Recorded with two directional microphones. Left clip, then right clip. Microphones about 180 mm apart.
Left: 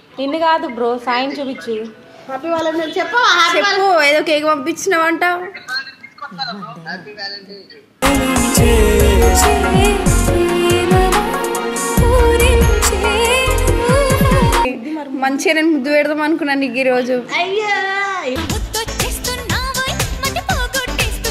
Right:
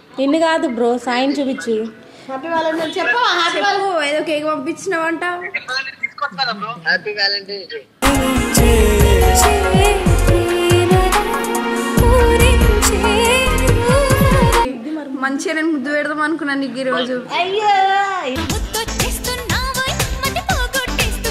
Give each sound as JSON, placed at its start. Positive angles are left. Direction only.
{"t": 0.2, "sound": "a woman's voice", "side_deg": -40}
{"t": 3.2, "sound": "a woman's voice", "side_deg": 40}
{"t": 6.9, "sound": "a man's voice", "side_deg": -55}
{"t": 8.0, "sound": "music", "side_deg": 0}
{"t": 15.1, "sound": "a woman's voice", "side_deg": 30}
{"t": 18.3, "sound": "music", "side_deg": -5}